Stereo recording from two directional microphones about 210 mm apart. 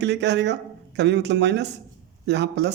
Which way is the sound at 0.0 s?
55° right (ahead or behind).